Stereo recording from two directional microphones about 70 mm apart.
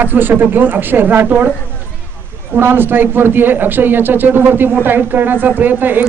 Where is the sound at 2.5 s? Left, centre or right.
Right.